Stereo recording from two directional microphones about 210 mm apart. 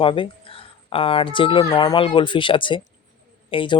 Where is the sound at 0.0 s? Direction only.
25° left (ahead or behind).